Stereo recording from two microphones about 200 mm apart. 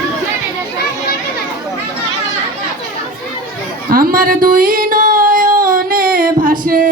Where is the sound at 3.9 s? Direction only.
45° right (ahead or behind).